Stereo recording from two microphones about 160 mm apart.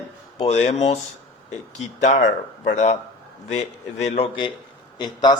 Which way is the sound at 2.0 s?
50° left (ahead or behind).